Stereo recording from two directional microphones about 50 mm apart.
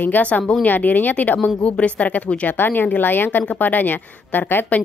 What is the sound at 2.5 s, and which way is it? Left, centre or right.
Speech, left.